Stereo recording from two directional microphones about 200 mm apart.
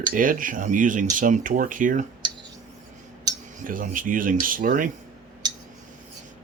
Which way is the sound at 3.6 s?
40° right (ahead or behind).